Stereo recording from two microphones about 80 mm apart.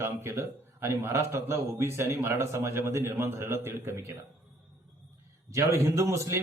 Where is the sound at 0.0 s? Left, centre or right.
Right.